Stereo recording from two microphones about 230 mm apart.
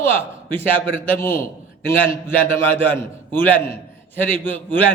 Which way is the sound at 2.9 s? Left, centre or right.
Centre.